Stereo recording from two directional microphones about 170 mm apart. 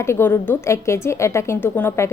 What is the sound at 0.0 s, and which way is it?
A woman's voice, 15° left (ahead or behind).